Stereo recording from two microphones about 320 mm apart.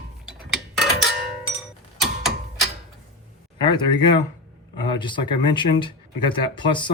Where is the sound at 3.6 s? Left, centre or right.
Centre.